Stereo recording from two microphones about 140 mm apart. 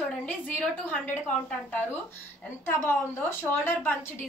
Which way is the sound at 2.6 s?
15° left (ahead or behind).